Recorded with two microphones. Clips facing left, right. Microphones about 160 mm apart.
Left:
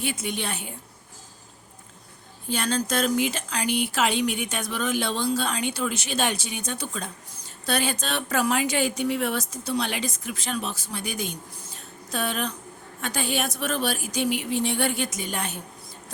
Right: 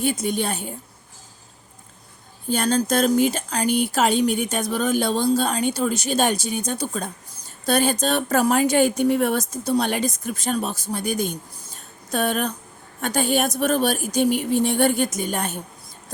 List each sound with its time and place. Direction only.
0.0 s a woman's voice: 40° right (ahead or behind)
2.5 s speech: 40° right (ahead or behind)
11.7 s a sound: 50° right (ahead or behind)
13.0 s speech: 45° right (ahead or behind)